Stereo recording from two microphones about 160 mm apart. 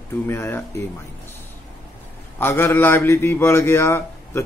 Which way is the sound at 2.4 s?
15° left (ahead or behind).